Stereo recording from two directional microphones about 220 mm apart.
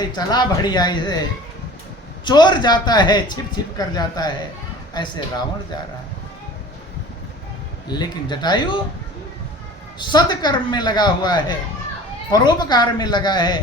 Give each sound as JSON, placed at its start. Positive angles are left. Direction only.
{"t": 0.2, "sound": "a man's voice", "side_deg": 20}
{"t": 2.2, "sound": "a man's voice", "side_deg": 20}
{"t": 7.9, "sound": "a man's voice", "side_deg": 20}
{"t": 10.0, "sound": "a man's voice", "side_deg": 20}